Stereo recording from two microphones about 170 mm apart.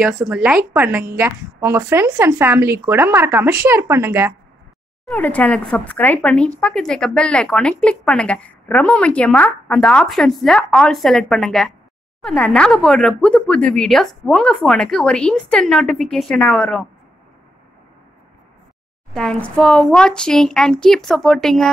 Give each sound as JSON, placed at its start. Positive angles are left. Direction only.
{"t": 0.3, "sound": "a woman's voice", "side_deg": -5}
{"t": 5.0, "sound": "a woman's voice", "side_deg": 10}
{"t": 19.1, "sound": "a woman's voice", "side_deg": 5}